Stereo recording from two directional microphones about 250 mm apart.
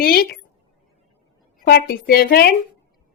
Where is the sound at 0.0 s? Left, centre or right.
Left.